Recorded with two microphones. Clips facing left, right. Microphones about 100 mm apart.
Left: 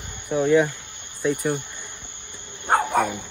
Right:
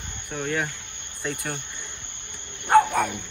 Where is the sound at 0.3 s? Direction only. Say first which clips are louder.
Left 10 dB; 15° left (ahead or behind).